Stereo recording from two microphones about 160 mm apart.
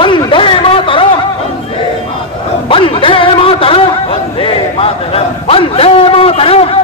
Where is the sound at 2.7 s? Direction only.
35° left (ahead or behind).